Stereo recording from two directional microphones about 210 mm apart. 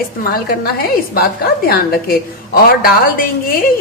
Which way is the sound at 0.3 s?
45° left (ahead or behind).